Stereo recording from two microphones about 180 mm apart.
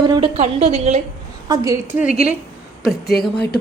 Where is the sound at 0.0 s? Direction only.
25° right (ahead or behind).